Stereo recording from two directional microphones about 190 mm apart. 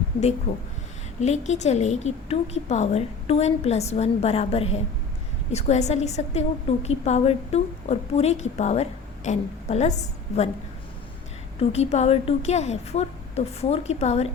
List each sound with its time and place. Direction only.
0.5 s a woman's voice: 35° left (ahead or behind)
11.7 s a woman's voice: 35° left (ahead or behind)